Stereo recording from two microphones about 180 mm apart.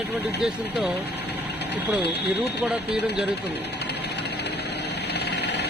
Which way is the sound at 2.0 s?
65° left (ahead or behind).